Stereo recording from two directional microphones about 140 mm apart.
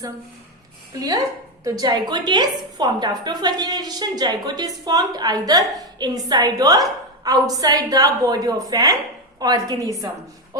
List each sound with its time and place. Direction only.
0.9 s a woman's voice: 25° right (ahead or behind)